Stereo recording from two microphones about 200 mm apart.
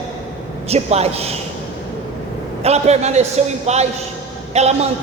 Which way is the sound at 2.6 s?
30° right (ahead or behind).